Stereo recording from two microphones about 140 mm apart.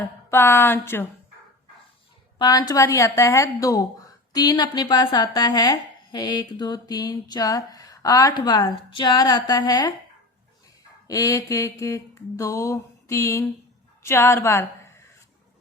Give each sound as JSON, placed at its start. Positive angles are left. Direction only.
{"t": 0.0, "sound": "speech", "side_deg": 15}
{"t": 2.4, "sound": "speech", "side_deg": 30}
{"t": 11.1, "sound": "a woman's voice", "side_deg": 25}